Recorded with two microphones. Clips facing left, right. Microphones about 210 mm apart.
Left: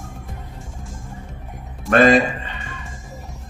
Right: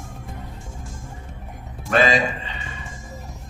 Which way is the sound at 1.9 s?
55° left (ahead or behind).